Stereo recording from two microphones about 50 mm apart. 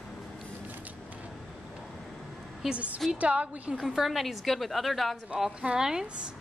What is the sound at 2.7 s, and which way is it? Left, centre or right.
A woman's voice, right.